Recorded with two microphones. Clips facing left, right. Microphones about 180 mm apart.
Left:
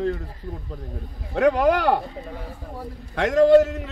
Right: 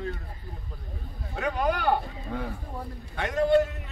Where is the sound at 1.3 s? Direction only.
75° left (ahead or behind).